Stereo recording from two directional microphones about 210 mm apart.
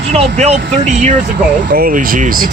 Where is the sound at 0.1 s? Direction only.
30° right (ahead or behind).